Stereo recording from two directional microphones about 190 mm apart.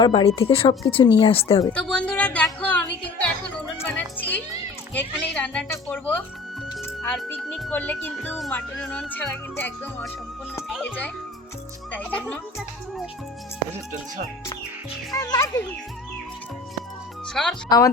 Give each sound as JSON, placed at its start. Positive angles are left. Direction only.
{"t": 0.0, "sound": "speech", "side_deg": 25}
{"t": 1.7, "sound": "music", "side_deg": 5}
{"t": 4.9, "sound": "a child's voice", "side_deg": 5}
{"t": 15.1, "sound": "speech", "side_deg": 20}
{"t": 17.4, "sound": "a child's voice", "side_deg": 0}